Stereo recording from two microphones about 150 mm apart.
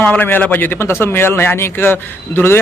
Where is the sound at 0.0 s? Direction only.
10° left (ahead or behind).